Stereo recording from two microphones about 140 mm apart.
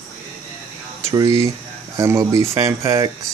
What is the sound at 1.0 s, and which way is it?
Speech, 25° right (ahead or behind).